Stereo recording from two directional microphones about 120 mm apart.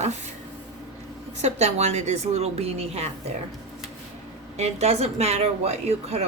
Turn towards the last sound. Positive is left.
turn(degrees=-60)  # may be behind; listen again after turning